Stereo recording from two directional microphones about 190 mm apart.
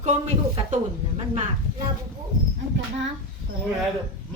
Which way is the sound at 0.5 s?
30° right (ahead or behind).